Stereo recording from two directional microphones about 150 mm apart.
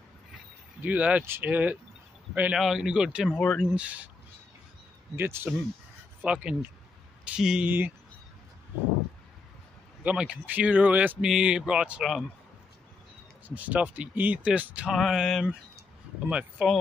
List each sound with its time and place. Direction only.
0.8 s speech: 10° right (ahead or behind)
3.3 s speech: 5° left (ahead or behind)
3.7 s speech: 10° right (ahead or behind)
5.1 s speech: 15° right (ahead or behind)
10.0 s speech: 10° right (ahead or behind)
13.6 s speech: 10° right (ahead or behind)